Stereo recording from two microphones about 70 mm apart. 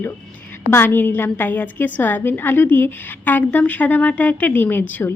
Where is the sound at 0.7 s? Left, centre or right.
Left.